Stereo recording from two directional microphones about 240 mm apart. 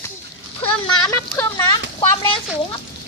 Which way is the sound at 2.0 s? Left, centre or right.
Left.